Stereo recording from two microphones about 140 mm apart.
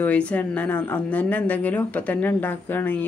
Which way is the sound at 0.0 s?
10° left (ahead or behind).